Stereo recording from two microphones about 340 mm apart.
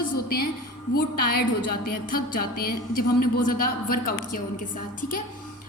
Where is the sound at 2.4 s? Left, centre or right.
Left.